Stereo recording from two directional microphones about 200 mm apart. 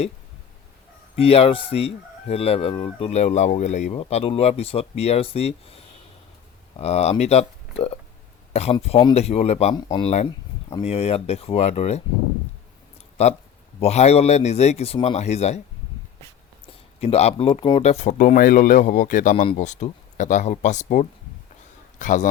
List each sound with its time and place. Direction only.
1.1 s speech: 30° left (ahead or behind)
8.5 s speech: 30° left (ahead or behind)
13.2 s speech: 30° left (ahead or behind)
17.0 s a man's voice: 30° left (ahead or behind)